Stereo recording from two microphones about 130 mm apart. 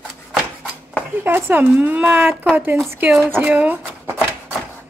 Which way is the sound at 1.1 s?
15° right (ahead or behind).